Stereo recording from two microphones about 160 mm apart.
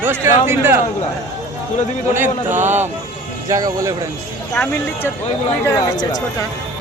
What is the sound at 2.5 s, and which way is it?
Speech, 50° right (ahead or behind).